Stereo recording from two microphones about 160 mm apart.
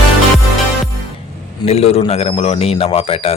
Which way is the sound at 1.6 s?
40° left (ahead or behind).